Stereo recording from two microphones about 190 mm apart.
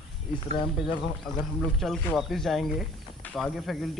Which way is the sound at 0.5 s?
25° left (ahead or behind).